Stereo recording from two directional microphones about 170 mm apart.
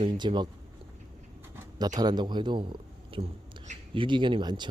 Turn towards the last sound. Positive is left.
turn(degrees=-25)  # may be behind; listen again after turning